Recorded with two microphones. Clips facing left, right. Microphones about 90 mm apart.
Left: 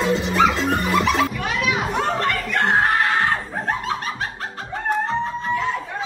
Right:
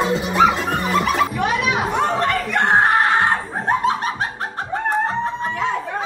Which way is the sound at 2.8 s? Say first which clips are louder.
Right 3 dB; 35° right (ahead or behind).